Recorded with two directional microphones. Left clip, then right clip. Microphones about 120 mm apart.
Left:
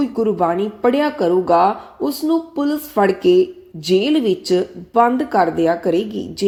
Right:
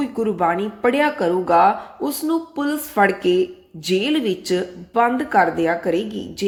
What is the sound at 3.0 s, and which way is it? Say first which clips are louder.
A woman's voice: left 3 dB; 35° left (ahead or behind).